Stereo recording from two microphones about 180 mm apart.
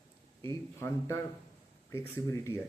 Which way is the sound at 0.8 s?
15° left (ahead or behind).